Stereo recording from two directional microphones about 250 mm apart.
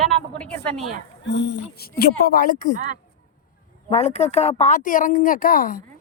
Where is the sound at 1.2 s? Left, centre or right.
Left.